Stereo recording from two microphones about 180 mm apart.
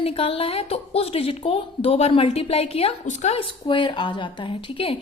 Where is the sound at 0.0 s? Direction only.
35° left (ahead or behind).